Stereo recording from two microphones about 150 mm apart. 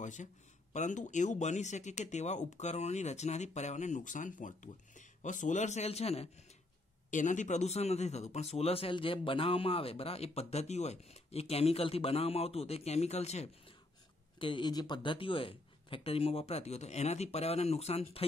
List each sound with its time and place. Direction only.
0.0 s a man's voice: 55° left (ahead or behind)
7.1 s a man's voice: 55° left (ahead or behind)
14.4 s speech: 35° left (ahead or behind)